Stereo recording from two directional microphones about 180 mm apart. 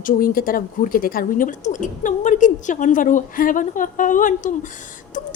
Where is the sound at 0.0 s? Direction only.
50° left (ahead or behind).